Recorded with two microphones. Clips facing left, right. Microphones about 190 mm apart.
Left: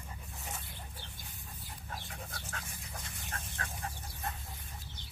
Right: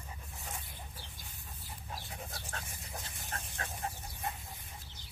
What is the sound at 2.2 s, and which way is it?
Dog, 25° right (ahead or behind).